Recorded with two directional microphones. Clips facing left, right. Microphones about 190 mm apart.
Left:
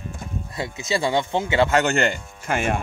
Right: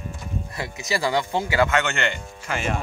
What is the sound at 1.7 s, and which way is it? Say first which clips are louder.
Speech: left 4 dB; 40° left (ahead or behind).